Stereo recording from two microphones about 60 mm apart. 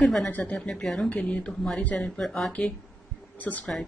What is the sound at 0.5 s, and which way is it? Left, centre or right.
Speech, centre.